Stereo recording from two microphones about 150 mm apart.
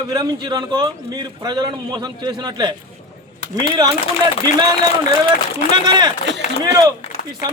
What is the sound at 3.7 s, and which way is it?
Speech, 25° right (ahead or behind).